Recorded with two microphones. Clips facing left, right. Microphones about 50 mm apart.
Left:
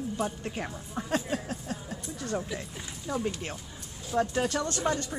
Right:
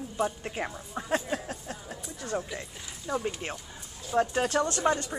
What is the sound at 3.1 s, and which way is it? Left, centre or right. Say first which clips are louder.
A woman's voice: right 1 dB; centre.